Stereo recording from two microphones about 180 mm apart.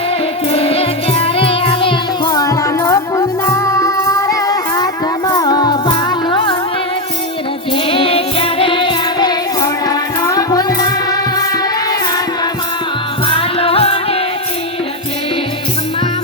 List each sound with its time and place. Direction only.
0.5 s music: 30° left (ahead or behind)
7.9 s music: 30° left (ahead or behind)
13.2 s music: 30° left (ahead or behind)